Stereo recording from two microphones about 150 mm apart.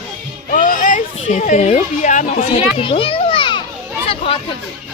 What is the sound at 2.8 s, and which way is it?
Children playing, 35° left (ahead or behind).